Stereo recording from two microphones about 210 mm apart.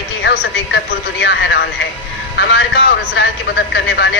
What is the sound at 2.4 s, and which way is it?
A woman's voice, 55° left (ahead or behind).